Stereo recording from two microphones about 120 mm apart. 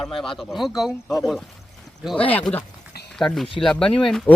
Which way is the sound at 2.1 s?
10° left (ahead or behind).